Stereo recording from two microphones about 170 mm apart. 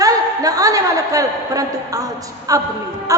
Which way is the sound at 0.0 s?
20° right (ahead or behind).